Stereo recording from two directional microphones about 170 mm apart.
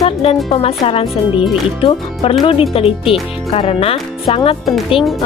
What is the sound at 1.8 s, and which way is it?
Speech, 35° left (ahead or behind).